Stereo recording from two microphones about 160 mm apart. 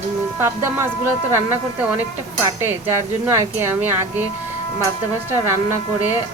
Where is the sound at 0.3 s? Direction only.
15° right (ahead or behind).